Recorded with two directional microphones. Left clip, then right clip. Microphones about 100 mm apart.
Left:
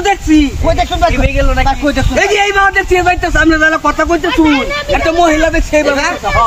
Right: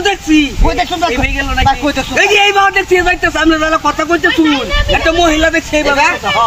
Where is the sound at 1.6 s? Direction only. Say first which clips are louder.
Right 4 dB; 20° left (ahead or behind).